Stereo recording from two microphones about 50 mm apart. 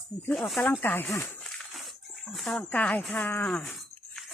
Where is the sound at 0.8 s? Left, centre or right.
Left.